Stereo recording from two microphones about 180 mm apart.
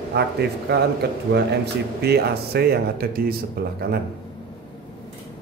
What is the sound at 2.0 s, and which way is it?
Speech, 65° right (ahead or behind).